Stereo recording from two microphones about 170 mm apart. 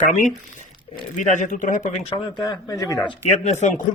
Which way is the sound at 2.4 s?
20° left (ahead or behind).